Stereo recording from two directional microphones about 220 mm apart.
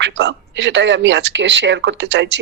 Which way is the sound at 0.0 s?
55° right (ahead or behind).